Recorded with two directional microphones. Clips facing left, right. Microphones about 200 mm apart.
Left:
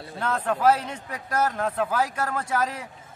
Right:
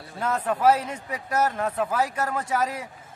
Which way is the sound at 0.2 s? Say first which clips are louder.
Right 1 dB; 10° right (ahead or behind).